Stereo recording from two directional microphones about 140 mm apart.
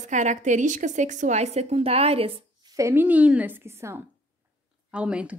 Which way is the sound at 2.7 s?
20° right (ahead or behind).